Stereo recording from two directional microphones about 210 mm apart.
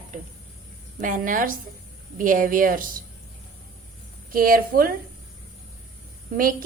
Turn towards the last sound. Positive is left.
turn(degrees=-40)  # may be behind; listen again after turning